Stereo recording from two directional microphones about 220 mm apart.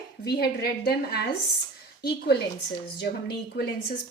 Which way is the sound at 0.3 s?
50° left (ahead or behind).